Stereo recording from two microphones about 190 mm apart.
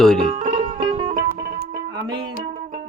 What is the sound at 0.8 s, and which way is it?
Music, 30° right (ahead or behind).